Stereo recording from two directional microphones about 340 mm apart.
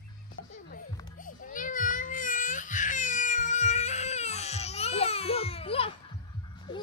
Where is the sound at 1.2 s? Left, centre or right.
Left.